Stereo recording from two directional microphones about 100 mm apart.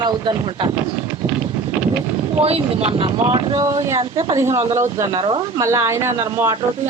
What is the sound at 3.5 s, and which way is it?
Speech, 35° right (ahead or behind).